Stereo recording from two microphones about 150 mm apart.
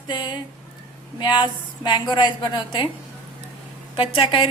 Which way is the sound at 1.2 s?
30° left (ahead or behind).